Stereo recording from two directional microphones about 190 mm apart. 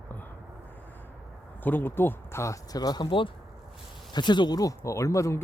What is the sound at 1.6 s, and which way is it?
Speech, 10° left (ahead or behind).